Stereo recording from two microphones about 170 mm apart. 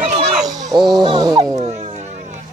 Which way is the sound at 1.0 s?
25° right (ahead or behind).